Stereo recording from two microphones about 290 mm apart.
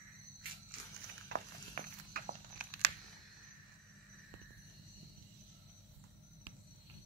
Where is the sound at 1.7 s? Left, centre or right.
Right.